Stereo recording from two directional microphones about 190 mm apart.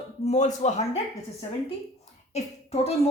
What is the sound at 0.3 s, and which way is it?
Speech, 35° left (ahead or behind).